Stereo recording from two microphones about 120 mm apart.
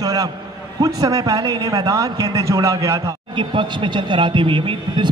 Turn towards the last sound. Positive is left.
turn(degrees=-45)  # may be behind; listen again after turning